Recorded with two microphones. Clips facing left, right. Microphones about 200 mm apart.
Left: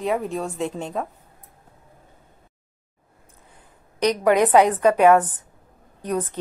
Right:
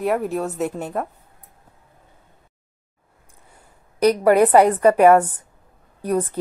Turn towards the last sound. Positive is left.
turn(degrees=-10)  # may be behind; listen again after turning